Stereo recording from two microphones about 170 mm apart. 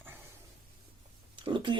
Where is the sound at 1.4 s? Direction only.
30° right (ahead or behind).